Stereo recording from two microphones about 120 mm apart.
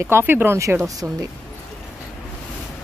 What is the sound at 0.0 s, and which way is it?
Speech, 20° right (ahead or behind).